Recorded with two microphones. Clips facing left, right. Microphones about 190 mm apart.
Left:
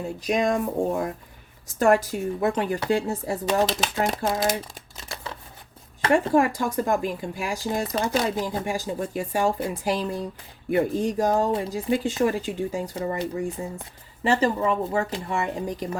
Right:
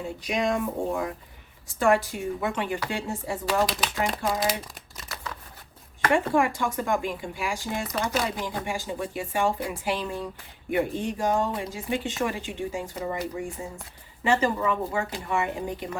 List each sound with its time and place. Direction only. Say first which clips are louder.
0.3 s speech: left 3 dB; 45° left (ahead or behind)
5.0 s a sound: left 2 dB; 30° left (ahead or behind)
6.1 s speech: left 3 dB; 40° left (ahead or behind)